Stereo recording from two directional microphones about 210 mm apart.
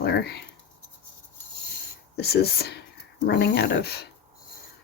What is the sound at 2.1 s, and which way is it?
A woman's voice, 50° left (ahead or behind).